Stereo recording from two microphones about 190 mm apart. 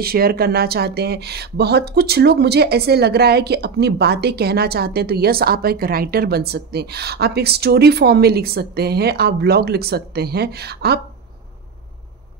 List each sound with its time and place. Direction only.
0.0 s speech: 55° right (ahead or behind)